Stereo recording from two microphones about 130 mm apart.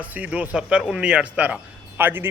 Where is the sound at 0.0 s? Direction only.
10° right (ahead or behind).